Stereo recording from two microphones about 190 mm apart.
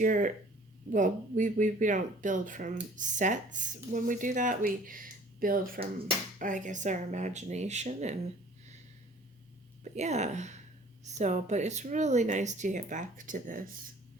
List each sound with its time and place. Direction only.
0.0 s speech: 45° right (ahead or behind)
9.8 s speech: 35° right (ahead or behind)